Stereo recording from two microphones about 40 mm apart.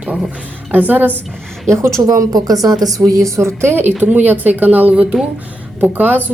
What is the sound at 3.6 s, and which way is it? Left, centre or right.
Speech, right.